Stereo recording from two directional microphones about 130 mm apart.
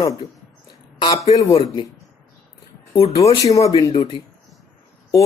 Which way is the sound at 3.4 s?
25° left (ahead or behind).